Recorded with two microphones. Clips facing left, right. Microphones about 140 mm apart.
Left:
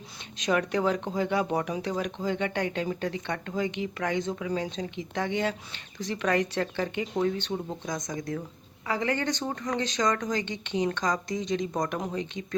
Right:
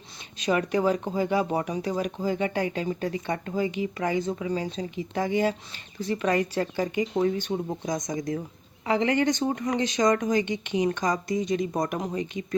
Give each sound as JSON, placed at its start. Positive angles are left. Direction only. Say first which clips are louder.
{"t": 0.3, "sound": "speech", "louder": "right 2 dB", "side_deg": -5}